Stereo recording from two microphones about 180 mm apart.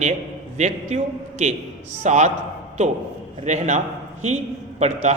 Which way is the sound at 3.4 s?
40° right (ahead or behind).